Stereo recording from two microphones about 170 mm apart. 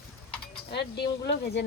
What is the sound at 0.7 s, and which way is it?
Speech, 80° left.